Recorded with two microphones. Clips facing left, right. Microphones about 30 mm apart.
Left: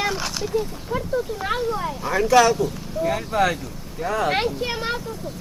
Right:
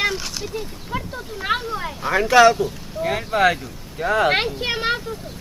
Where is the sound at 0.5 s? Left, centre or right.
Right.